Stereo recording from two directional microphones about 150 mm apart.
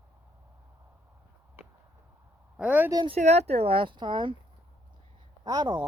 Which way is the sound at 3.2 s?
45° right (ahead or behind).